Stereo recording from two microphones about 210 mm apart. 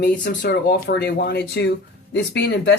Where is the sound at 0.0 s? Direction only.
50° left (ahead or behind).